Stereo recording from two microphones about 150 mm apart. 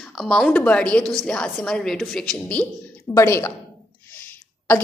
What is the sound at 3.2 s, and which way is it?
Speech, 20° left (ahead or behind).